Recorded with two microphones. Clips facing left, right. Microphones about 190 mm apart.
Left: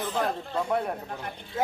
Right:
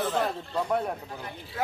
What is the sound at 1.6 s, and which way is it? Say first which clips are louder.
Speech: left 3 dB; 25° left (ahead or behind).